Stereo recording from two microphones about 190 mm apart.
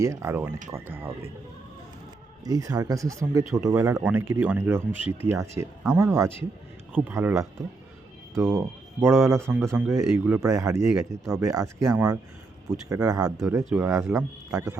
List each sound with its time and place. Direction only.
0.0 s speech: 15° right (ahead or behind)
2.4 s speech: 20° right (ahead or behind)
9.4 s speech: 5° left (ahead or behind); by 14.8 s 15° right (ahead or behind)